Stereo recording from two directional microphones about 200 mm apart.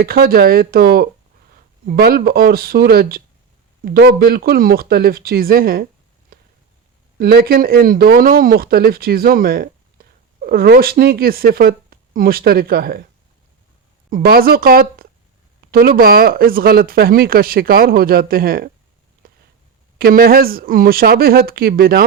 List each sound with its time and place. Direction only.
0.0 s speech: 50° right (ahead or behind)
7.2 s speech: 50° right (ahead or behind)
14.1 s speech: 50° right (ahead or behind)
20.0 s speech: 50° right (ahead or behind)